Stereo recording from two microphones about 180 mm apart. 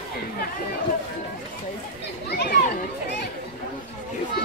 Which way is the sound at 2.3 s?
65° left (ahead or behind).